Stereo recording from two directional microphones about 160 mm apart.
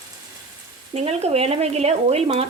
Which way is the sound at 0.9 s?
40° right (ahead or behind).